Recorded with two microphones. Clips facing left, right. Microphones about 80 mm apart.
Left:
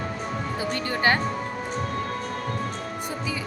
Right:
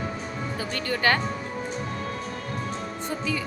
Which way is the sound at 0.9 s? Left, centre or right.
Left.